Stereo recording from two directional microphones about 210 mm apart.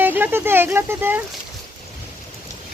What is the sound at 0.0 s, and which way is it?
Speech, 10° right (ahead or behind).